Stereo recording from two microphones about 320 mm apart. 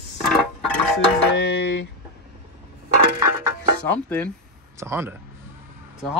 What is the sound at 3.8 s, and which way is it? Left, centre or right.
Speech, centre.